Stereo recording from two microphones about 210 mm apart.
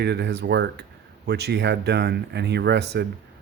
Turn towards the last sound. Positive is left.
turn(degrees=-50)  # may be behind; listen again after turning